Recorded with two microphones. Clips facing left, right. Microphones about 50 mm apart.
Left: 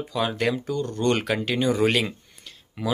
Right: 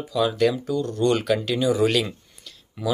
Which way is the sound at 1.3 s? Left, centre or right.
Left.